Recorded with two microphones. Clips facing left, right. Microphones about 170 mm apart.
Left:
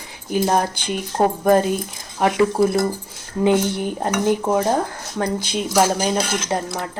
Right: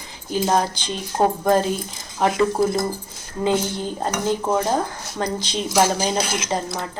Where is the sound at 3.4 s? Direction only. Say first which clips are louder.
Left 4 dB; 15° left (ahead or behind).